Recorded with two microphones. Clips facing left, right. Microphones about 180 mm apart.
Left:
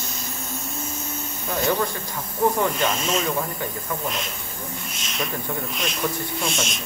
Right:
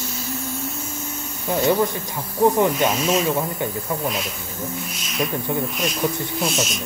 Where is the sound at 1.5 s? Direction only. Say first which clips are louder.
Right 5 dB; 15° right (ahead or behind).